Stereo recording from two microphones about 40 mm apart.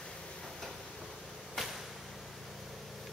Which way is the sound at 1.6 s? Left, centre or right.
Centre.